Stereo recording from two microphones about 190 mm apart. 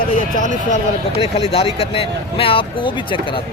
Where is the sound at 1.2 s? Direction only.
30° left (ahead or behind).